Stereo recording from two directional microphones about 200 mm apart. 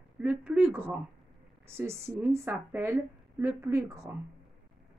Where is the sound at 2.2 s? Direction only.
10° right (ahead or behind).